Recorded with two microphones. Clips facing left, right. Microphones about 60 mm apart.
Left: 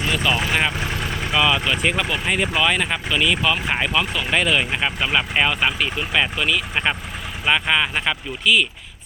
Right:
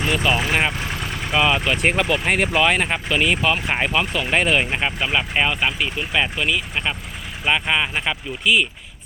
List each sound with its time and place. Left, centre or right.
0.1 s speech: right
2.0 s speech: right
3.7 s speech: right
4.8 s speech: centre
6.8 s speech: centre
7.4 s speech: centre